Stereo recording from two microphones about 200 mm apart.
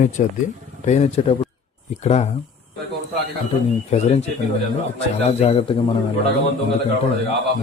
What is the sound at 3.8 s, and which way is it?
A man's voice, 35° left (ahead or behind).